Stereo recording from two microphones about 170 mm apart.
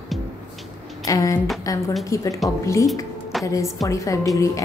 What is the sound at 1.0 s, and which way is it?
A woman's voice, 20° left (ahead or behind).